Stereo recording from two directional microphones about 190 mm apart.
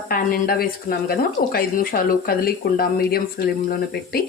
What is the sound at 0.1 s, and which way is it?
Speech, 50° left (ahead or behind).